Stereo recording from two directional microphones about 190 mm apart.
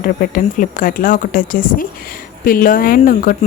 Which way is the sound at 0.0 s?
45° left (ahead or behind).